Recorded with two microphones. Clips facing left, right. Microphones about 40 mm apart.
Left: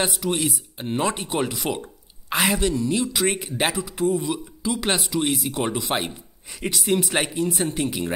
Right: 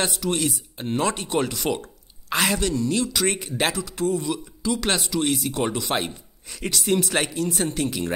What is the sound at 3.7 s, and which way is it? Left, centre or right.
Speech, left.